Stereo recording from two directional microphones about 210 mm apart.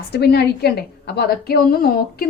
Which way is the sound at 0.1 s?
50° left (ahead or behind).